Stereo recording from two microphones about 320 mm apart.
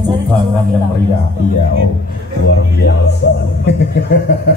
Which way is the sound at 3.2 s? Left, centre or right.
Left.